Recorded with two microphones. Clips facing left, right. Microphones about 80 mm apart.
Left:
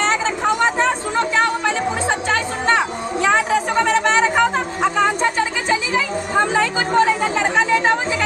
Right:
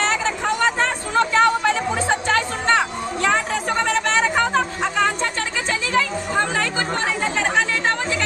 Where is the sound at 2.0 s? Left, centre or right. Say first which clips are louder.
Even; centre.